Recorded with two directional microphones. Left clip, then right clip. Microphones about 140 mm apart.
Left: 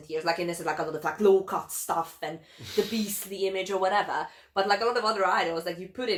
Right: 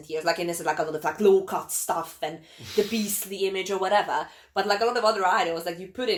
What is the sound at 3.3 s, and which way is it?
Speech, 25° right (ahead or behind).